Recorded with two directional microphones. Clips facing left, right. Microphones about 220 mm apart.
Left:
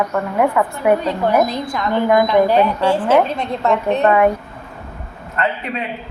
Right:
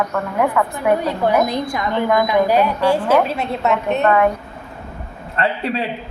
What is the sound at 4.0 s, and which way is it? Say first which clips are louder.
Speech: left 1 dB; 15° left (ahead or behind).